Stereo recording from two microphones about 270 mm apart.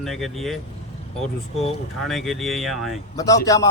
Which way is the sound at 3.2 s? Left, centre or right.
Centre.